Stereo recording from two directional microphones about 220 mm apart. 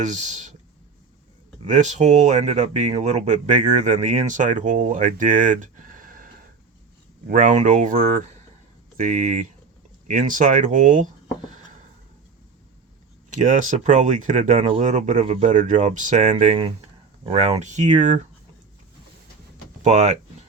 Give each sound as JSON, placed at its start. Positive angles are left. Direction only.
{"t": 0.0, "sound": "speech", "side_deg": -35}
{"t": 1.6, "sound": "speech", "side_deg": -30}
{"t": 13.3, "sound": "speech", "side_deg": -35}
{"t": 19.8, "sound": "speech", "side_deg": -30}